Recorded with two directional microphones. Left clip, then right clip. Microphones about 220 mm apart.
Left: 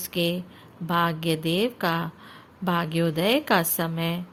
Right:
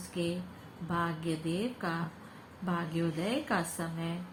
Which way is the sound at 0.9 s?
55° left (ahead or behind).